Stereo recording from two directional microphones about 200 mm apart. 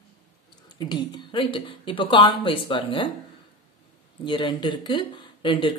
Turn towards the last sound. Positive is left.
turn(degrees=25)  # may be behind; listen again after turning